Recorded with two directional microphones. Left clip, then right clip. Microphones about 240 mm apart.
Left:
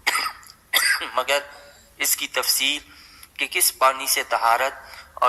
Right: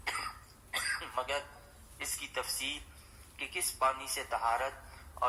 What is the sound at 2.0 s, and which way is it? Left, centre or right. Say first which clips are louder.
A man's voice: left 14 dB; left.